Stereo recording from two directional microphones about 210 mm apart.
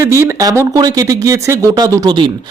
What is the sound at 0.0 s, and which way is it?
Speech, 15° right (ahead or behind).